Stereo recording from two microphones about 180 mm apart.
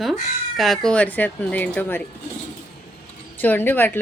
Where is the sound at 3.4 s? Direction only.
10° left (ahead or behind).